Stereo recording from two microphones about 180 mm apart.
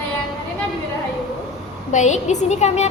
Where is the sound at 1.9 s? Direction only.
40° left (ahead or behind).